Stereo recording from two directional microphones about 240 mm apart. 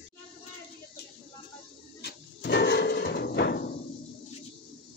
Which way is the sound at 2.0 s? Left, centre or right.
Left.